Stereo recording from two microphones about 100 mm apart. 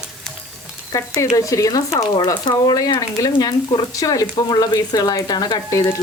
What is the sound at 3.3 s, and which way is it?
Speech, 50° left (ahead or behind).